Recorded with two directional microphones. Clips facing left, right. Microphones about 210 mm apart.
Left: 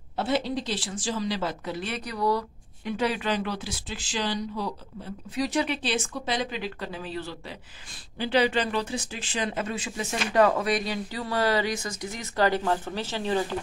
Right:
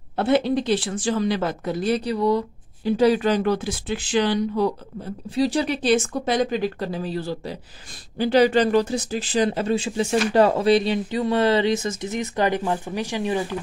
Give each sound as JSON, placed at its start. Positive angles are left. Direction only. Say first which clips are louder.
{"t": 0.1, "sound": "a woman's voice", "louder": "right 7 dB", "side_deg": -60}
{"t": 5.3, "sound": "speech", "louder": "right 5 dB", "side_deg": -30}